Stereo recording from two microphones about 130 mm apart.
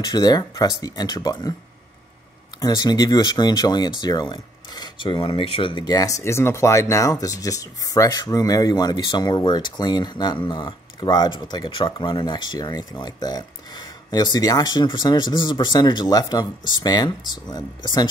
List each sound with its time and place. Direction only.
0.0 s speech: 30° left (ahead or behind)
2.6 s speech: 30° left (ahead or behind)
5.9 s speech: 25° left (ahead or behind)